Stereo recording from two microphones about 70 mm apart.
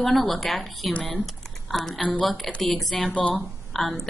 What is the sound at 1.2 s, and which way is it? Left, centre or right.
Typing, centre.